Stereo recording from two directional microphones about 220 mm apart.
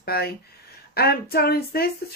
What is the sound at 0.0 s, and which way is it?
Speech, 45° left (ahead or behind).